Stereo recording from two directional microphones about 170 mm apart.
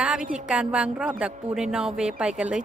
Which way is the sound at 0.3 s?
5° right (ahead or behind).